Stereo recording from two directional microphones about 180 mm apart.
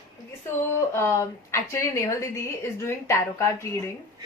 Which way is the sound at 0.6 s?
15° left (ahead or behind).